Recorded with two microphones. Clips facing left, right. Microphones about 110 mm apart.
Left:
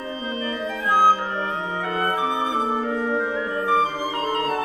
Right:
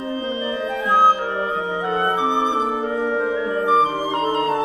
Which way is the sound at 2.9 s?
10° right (ahead or behind).